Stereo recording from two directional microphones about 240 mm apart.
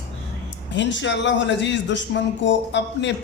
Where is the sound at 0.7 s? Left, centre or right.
Left.